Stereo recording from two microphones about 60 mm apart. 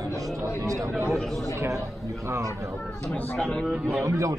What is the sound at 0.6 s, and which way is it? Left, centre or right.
Speech, right.